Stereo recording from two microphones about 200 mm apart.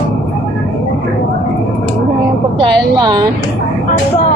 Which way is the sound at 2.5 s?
20° right (ahead or behind).